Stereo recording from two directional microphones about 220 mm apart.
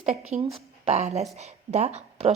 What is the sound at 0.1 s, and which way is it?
A woman's voice, 30° right (ahead or behind).